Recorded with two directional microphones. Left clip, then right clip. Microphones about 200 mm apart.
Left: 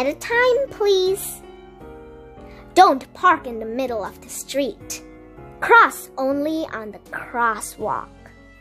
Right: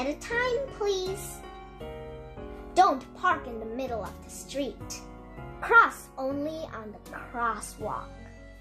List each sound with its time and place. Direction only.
0.0 s a child's voice: 55° left (ahead or behind)
2.7 s a child's voice: 55° left (ahead or behind)